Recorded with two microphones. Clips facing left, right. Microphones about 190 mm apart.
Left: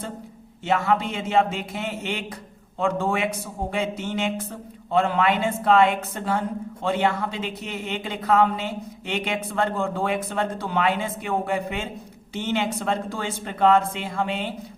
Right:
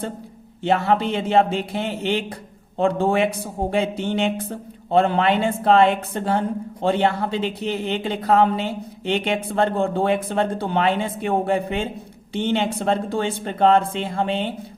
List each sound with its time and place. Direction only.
0.6 s speech: 30° right (ahead or behind)